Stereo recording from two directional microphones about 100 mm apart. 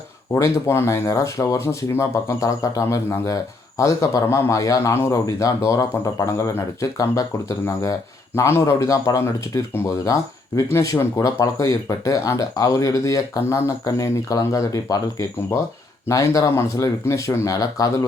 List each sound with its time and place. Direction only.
0.3 s a man's voice: 30° left (ahead or behind)